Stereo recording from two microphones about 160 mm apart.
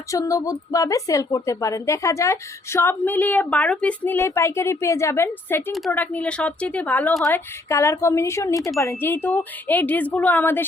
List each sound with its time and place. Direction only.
0.1 s a woman's voice: 20° left (ahead or behind)
7.3 s speech: 15° left (ahead or behind)